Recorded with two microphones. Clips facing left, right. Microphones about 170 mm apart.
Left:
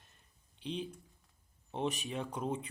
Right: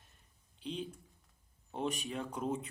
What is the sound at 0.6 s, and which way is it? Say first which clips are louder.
Speech: left 1 dB; centre (ahead or behind).